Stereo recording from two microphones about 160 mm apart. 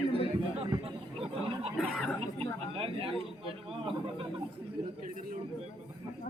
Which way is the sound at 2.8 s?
35° right (ahead or behind).